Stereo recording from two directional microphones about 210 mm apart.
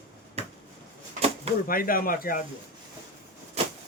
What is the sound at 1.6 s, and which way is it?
Speech, 45° left (ahead or behind).